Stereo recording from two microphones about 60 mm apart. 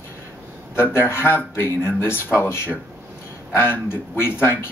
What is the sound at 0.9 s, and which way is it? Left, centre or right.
A man's voice, left.